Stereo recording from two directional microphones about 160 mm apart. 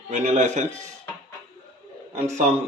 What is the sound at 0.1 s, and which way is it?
Speech, 45° right (ahead or behind).